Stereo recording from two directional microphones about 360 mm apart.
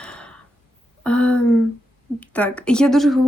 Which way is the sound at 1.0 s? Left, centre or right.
Centre.